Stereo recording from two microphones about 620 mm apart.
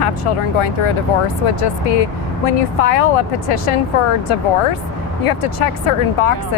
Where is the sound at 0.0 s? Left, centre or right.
Left.